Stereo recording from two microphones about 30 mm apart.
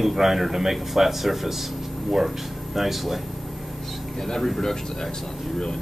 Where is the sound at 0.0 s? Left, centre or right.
Centre.